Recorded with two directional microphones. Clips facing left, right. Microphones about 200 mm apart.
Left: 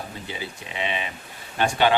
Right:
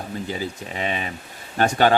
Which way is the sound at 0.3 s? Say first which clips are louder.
Right 6 dB; 40° right (ahead or behind).